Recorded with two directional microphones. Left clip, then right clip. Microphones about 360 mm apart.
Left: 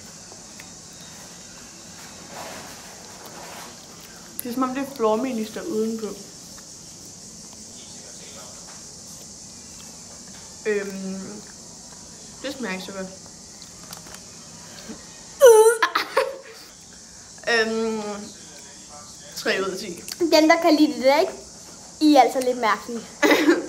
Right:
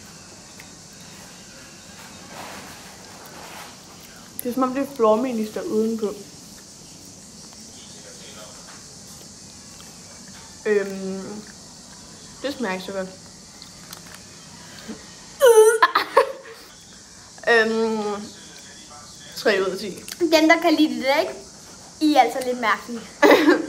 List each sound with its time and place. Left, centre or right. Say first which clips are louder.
4.5 s speech: right 3 dB; centre
10.6 s speech: right 4 dB; centre
12.4 s speech: right 3 dB; centre
15.3 s wail: left 1 dB; centre
15.8 s a sound: right 4 dB; centre
17.5 s a sound: right 4 dB; centre
19.3 s speech: right 4 dB; centre
20.2 s a woman's voice: even; centre
23.2 s a sound: right 3 dB; centre